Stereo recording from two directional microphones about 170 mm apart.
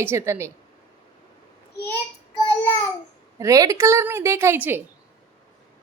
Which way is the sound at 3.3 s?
20° right (ahead or behind).